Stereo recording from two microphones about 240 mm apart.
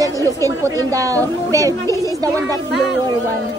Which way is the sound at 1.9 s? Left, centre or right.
Centre.